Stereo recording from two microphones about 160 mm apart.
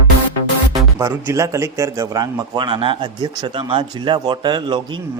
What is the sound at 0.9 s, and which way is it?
A man's voice, 15° right (ahead or behind).